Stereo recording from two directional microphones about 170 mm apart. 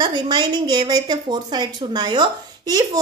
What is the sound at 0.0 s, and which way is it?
A woman's voice, 25° right (ahead or behind).